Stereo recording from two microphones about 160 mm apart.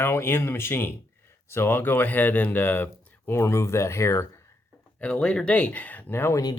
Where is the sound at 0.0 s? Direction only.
15° left (ahead or behind).